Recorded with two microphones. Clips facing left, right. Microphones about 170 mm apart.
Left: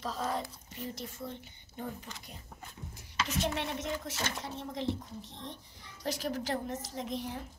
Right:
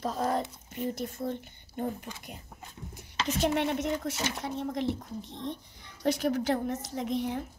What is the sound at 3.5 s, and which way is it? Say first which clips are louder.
A woman's voice: right 7 dB; 55° right (ahead or behind).